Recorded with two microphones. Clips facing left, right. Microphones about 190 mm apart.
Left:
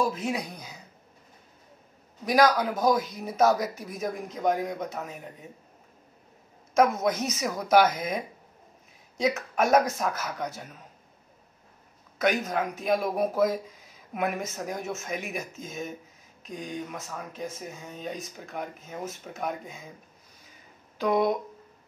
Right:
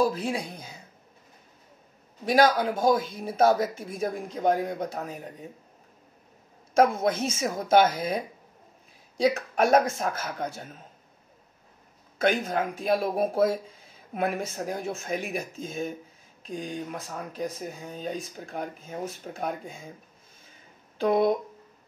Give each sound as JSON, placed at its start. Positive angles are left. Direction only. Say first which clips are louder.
{"t": 0.0, "sound": "speech", "louder": "right 2 dB", "side_deg": -35}
{"t": 2.2, "sound": "speech", "louder": "right 1 dB", "side_deg": -30}
{"t": 6.7, "sound": "speech", "louder": "right 1 dB", "side_deg": -30}
{"t": 12.2, "sound": "speech", "louder": "right 1 dB", "side_deg": -30}
{"t": 21.0, "sound": "speech", "louder": "right 2 dB", "side_deg": -30}